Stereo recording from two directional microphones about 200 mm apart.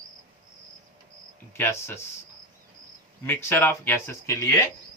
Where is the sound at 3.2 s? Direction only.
10° left (ahead or behind).